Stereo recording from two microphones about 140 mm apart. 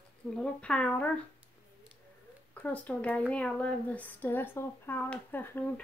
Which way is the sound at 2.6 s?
10° left (ahead or behind).